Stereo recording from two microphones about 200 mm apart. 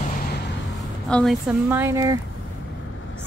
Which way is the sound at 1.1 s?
Centre (ahead or behind).